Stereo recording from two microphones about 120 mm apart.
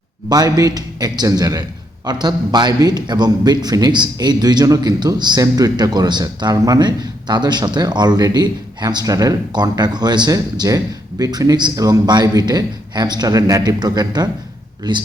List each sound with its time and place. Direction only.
0.3 s a man's voice: 30° right (ahead or behind)